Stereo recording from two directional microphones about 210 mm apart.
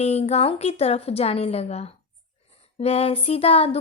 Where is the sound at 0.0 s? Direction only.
30° left (ahead or behind).